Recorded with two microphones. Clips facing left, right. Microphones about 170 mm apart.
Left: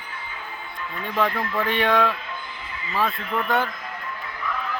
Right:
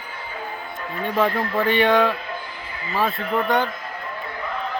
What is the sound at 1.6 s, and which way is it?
Speech, centre (ahead or behind).